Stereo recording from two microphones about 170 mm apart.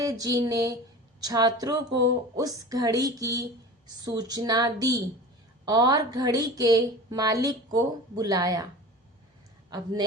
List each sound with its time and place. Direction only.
0.0 s a woman's voice: 20° right (ahead or behind)
9.6 s speech: 25° right (ahead or behind)